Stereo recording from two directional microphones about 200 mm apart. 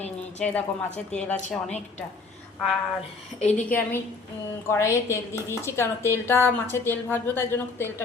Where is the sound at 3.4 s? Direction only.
35° left (ahead or behind).